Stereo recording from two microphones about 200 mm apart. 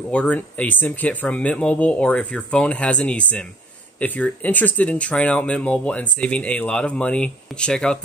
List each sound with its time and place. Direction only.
0.1 s speech: 5° left (ahead or behind)